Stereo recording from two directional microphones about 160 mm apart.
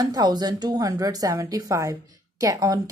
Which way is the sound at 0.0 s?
25° right (ahead or behind).